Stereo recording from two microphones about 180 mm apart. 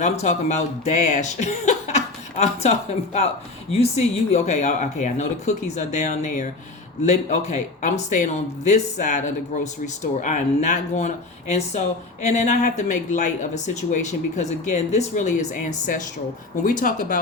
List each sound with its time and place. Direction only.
0.0 s speech: 40° left (ahead or behind)